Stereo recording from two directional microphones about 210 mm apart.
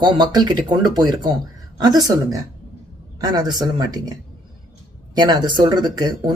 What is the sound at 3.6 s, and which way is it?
Speech, 20° right (ahead or behind).